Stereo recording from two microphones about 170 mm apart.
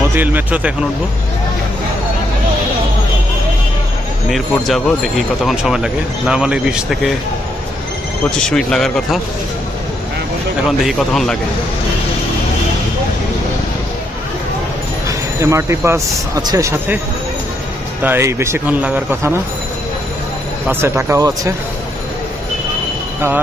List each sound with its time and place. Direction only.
0.1 s a man's voice: 10° right (ahead or behind)
4.3 s speech: centre (ahead or behind)
8.4 s speech: 5° left (ahead or behind)
10.9 s speech: centre (ahead or behind)
15.0 s speech: 15° right (ahead or behind)
18.0 s a man's voice: 15° right (ahead or behind)
20.6 s a man's voice: 15° right (ahead or behind)